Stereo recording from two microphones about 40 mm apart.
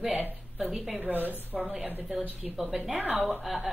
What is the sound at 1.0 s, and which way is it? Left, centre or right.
Speech, right.